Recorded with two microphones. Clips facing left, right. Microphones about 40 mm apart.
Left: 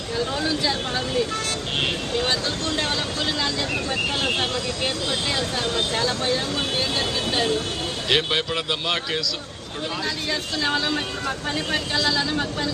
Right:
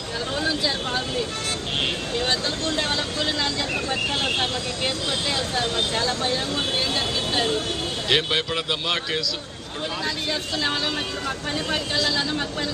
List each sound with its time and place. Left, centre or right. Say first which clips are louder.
5.5 s speech: even; right
8.1 s a man's voice: even; centre